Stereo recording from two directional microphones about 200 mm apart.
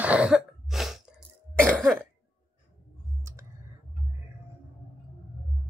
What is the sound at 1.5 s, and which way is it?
Cough, 5° left (ahead or behind).